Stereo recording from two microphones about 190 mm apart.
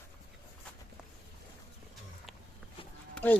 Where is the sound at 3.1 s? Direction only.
10° left (ahead or behind).